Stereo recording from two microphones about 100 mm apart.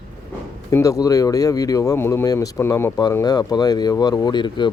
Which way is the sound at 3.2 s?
40° left (ahead or behind).